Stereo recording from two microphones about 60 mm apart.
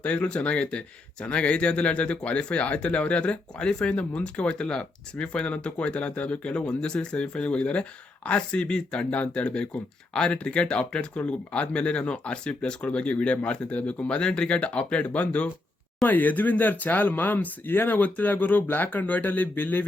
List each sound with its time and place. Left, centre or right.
0.0 s speech: left